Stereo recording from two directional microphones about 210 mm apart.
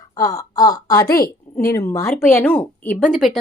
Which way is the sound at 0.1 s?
15° left (ahead or behind).